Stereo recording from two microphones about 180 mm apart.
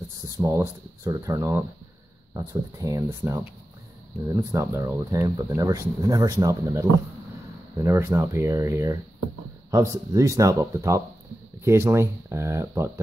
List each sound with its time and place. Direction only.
0.4 s speech: 15° right (ahead or behind)